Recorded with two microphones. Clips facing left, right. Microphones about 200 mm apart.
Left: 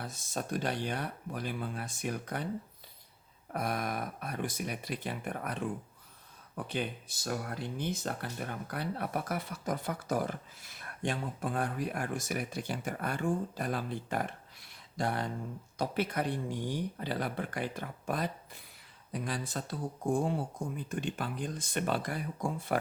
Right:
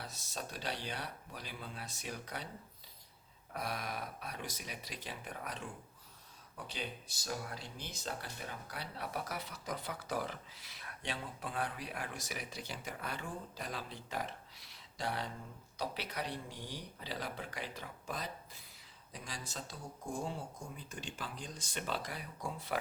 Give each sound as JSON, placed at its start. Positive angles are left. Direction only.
{"t": 0.0, "sound": "speech", "side_deg": 50}
{"t": 3.5, "sound": "speech", "side_deg": 50}